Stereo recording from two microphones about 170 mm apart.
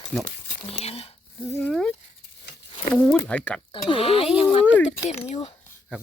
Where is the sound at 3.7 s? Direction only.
35° left (ahead or behind).